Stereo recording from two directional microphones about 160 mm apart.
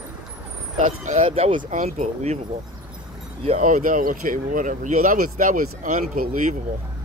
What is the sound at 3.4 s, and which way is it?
Speech, 50° right (ahead or behind).